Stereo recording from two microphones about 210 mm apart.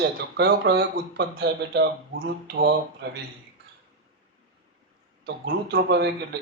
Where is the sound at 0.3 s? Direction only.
50° right (ahead or behind).